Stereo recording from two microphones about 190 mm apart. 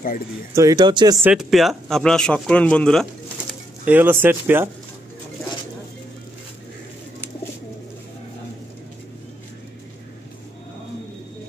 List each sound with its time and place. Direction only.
0.6 s speech: 20° right (ahead or behind)
1.1 s speech: 5° right (ahead or behind)
3.8 s speech: 10° right (ahead or behind)